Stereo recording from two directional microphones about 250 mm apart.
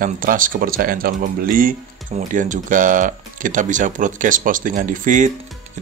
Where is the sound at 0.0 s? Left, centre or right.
Right.